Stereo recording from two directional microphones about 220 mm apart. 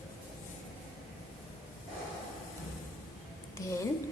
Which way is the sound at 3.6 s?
15° left (ahead or behind).